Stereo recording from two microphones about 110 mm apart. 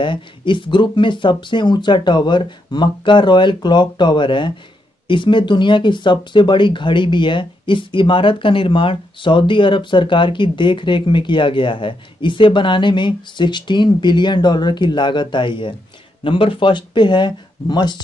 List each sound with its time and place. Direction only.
0.0 s speech: 50° left (ahead or behind)